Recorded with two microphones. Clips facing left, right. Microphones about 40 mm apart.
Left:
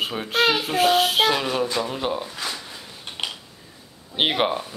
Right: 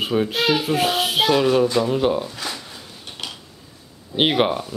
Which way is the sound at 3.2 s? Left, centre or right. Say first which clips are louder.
Left 3 dB; left.